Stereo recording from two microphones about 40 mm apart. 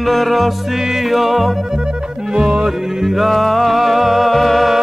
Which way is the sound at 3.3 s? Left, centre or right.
Centre.